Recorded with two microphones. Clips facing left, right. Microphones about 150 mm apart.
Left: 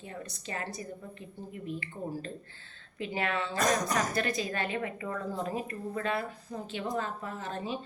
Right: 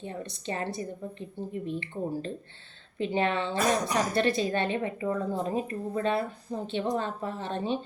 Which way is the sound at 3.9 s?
30° right (ahead or behind).